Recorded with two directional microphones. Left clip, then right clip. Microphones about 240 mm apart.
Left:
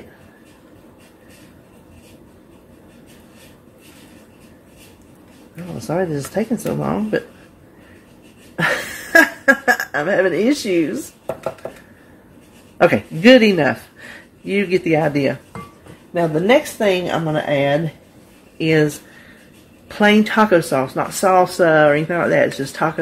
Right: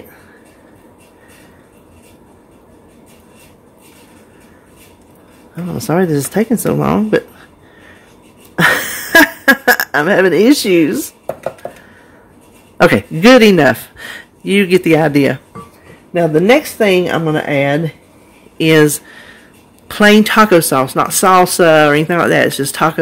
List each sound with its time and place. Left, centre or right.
5.9 s speech: right
8.5 s a sound: right
12.8 s speech: right
19.9 s speech: right